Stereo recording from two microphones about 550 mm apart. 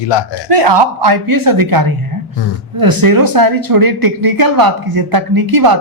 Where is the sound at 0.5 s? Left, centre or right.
Right.